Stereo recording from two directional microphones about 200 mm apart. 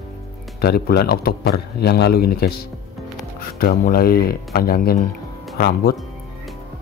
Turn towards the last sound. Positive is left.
turn(degrees=50)  # may be behind; listen again after turning